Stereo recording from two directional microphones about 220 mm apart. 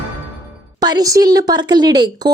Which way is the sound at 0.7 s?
20° right (ahead or behind).